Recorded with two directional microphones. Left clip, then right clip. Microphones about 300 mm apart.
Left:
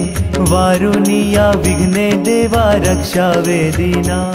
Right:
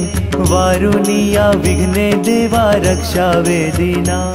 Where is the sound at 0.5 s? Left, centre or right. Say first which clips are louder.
Even; centre.